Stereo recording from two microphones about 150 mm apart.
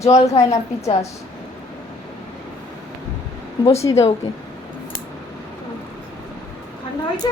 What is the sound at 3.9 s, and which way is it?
Speech, 30° left (ahead or behind).